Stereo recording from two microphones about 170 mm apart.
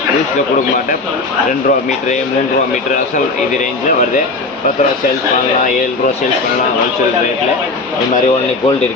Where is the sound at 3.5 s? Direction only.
45° left (ahead or behind).